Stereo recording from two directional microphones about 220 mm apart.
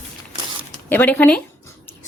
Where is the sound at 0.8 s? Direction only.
10° left (ahead or behind).